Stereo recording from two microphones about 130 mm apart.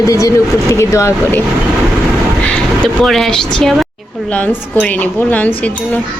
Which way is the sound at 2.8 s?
5° left (ahead or behind).